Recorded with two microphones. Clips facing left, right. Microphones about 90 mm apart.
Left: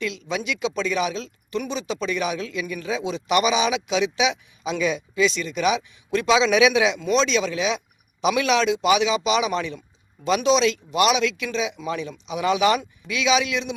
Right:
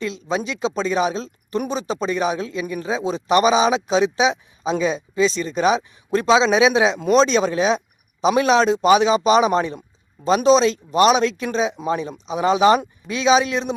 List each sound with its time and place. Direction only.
0.0 s speech: 35° right (ahead or behind)